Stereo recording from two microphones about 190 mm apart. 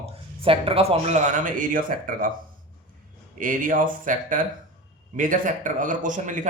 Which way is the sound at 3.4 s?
45° right (ahead or behind).